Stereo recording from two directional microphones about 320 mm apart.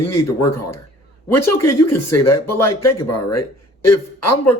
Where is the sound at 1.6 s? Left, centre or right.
Left.